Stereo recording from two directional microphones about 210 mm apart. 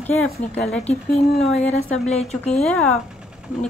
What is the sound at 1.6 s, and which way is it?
Speech, 35° left (ahead or behind).